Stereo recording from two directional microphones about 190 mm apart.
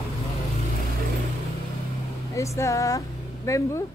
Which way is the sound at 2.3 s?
15° left (ahead or behind).